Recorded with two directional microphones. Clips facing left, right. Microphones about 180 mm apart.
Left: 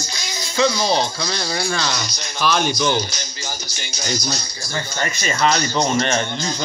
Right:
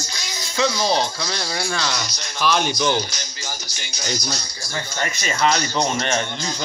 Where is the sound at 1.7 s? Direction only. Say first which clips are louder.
Left 1 dB; 20° left (ahead or behind).